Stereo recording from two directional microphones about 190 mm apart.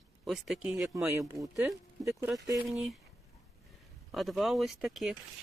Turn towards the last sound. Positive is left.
turn(degrees=0)  # may be behind; listen again after turning